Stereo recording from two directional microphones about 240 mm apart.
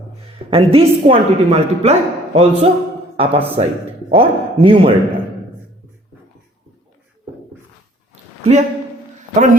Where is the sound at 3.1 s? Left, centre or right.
Right.